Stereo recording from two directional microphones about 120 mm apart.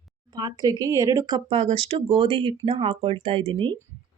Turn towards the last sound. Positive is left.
turn(degrees=-45)  # may be behind; listen again after turning